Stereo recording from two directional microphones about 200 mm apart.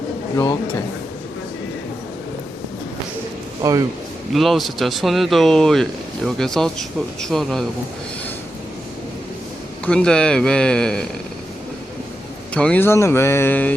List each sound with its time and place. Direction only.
3.6 s speech: 20° right (ahead or behind)
4.3 s speech: centre (ahead or behind)
9.8 s speech: 5° left (ahead or behind)
12.5 s speech: 5° left (ahead or behind)